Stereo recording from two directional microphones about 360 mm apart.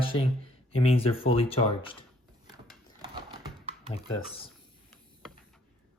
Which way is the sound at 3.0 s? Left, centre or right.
Centre.